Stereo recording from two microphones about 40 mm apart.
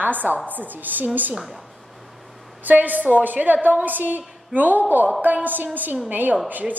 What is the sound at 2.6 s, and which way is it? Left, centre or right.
A woman's voice, right.